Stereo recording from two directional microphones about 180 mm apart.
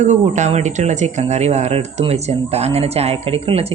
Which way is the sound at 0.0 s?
40° right (ahead or behind).